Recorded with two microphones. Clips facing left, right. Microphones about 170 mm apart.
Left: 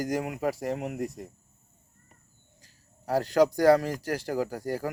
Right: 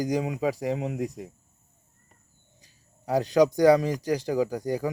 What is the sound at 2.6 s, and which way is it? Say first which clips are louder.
Speech: right 1 dB; 20° right (ahead or behind).